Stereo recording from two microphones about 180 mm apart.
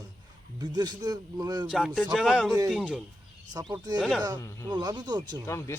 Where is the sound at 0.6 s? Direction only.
20° right (ahead or behind).